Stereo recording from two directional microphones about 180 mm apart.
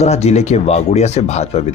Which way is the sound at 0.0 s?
40° left (ahead or behind).